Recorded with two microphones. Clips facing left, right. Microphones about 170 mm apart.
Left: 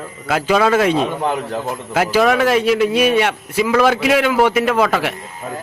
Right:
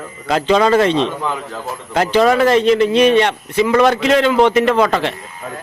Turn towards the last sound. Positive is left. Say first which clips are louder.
# left 1 dB
turn(degrees=20)  # may be behind; listen again after turning